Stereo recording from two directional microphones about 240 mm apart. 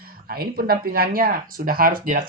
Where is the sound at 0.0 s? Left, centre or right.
Right.